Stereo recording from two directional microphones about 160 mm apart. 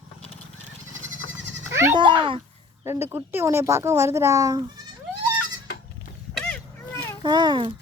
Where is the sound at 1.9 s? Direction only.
30° right (ahead or behind).